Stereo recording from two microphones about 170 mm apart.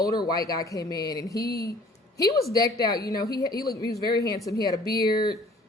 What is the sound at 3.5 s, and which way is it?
Speech, 65° left (ahead or behind).